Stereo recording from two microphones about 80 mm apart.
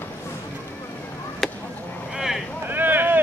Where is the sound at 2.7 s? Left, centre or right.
Right.